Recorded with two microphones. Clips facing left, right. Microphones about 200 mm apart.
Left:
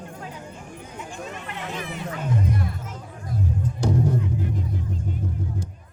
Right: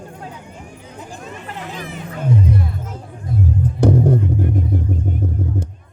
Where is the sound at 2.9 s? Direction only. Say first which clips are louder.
Right 6 dB; 30° right (ahead or behind).